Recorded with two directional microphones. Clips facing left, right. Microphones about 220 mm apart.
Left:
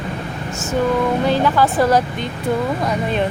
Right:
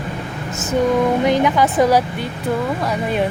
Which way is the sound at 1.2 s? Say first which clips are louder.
Right 1 dB; 20° right (ahead or behind).